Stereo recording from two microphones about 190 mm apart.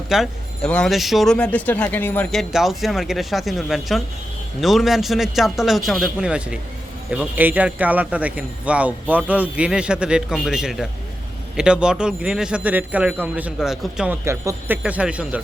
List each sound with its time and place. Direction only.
0.1 s a man's voice: centre (ahead or behind)